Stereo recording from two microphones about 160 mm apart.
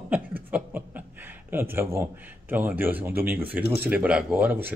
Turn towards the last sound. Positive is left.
turn(degrees=-10)  # may be behind; listen again after turning